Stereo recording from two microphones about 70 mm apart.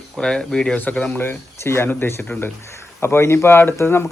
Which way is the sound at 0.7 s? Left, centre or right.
Left.